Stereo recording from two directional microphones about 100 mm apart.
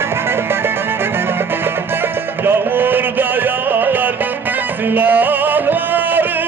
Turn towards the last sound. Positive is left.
turn(degrees=-20)  # may be behind; listen again after turning